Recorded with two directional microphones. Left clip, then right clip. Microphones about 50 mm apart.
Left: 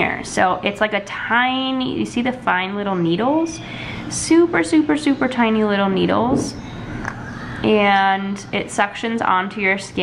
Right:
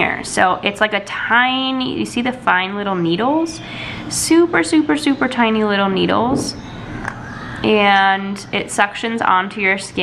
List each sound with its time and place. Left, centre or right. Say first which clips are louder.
0.4 s a woman's voice: right 2 dB; right
1.5 s a woman's voice: right 2 dB; right
7.6 s a woman's voice: right 2 dB; right